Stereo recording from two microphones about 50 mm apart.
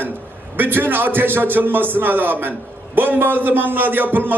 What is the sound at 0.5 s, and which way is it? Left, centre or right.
A man's voice, right.